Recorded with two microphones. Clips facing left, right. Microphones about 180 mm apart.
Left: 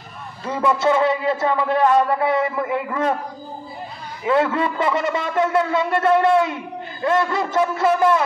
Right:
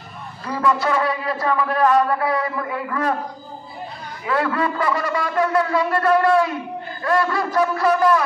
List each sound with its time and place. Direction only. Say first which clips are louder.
0.5 s a man's voice: left 2 dB; 25° left (ahead or behind)
4.3 s a man's voice: left 3 dB; 25° left (ahead or behind)